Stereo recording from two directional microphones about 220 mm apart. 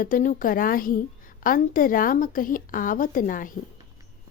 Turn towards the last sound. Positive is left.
turn(degrees=40)  # may be behind; listen again after turning